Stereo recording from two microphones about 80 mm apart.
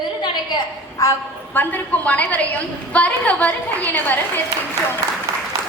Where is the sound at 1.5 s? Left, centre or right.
Left.